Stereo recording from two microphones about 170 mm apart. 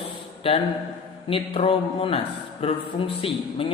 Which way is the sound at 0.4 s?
35° left (ahead or behind).